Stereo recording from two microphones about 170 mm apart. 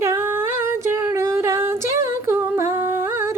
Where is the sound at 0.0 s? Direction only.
15° right (ahead or behind).